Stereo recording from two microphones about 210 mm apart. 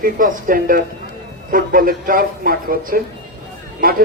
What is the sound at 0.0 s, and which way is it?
A man's voice, 40° right (ahead or behind).